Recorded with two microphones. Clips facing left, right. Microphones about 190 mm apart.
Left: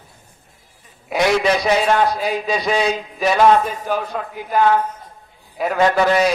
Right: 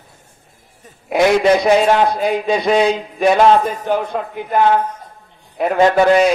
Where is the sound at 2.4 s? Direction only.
55° right (ahead or behind).